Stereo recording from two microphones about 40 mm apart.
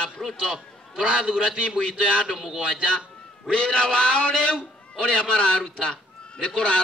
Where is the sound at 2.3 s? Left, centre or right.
Centre.